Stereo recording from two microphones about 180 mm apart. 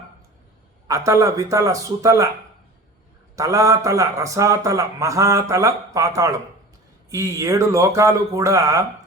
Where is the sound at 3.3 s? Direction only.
20° right (ahead or behind).